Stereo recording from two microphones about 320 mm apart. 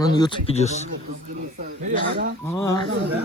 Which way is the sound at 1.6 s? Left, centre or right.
Right.